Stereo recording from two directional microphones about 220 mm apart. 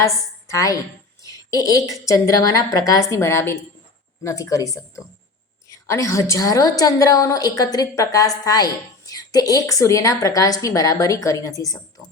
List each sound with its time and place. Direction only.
0.0 s a woman's voice: 15° left (ahead or behind)